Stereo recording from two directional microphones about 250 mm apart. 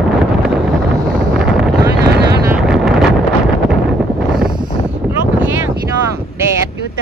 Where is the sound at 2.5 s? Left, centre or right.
Centre.